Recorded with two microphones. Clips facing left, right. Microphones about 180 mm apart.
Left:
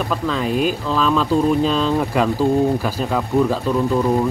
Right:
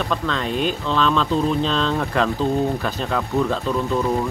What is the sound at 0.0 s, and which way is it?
Speech, 5° left (ahead or behind).